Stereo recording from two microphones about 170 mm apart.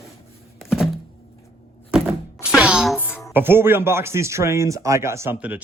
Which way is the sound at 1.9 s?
5° right (ahead or behind).